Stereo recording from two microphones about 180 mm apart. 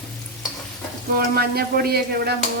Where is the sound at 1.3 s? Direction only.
60° right (ahead or behind).